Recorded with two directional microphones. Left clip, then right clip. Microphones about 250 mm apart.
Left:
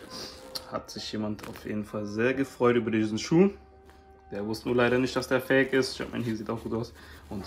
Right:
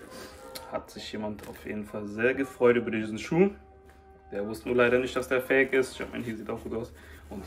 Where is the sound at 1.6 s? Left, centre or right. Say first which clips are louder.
Left 2 dB; centre.